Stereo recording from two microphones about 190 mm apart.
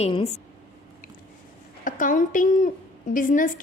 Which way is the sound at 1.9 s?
45° left (ahead or behind).